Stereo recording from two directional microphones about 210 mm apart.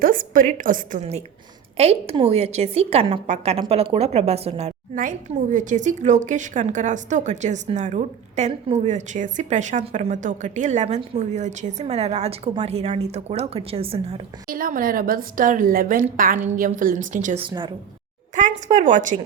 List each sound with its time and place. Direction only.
0.0 s a woman's voice: 40° right (ahead or behind)
14.4 s a woman's voice: 40° right (ahead or behind)
17.4 s a woman's voice: 20° right (ahead or behind)
18.3 s a woman's voice: 35° right (ahead or behind)